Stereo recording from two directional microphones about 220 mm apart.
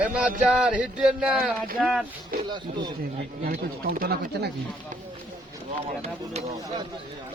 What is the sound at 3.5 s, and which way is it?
Speech, 40° right (ahead or behind).